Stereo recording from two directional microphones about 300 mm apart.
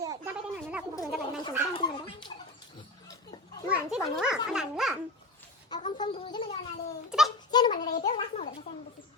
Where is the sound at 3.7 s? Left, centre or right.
Centre.